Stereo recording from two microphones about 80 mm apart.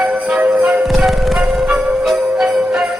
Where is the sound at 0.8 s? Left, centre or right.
Centre.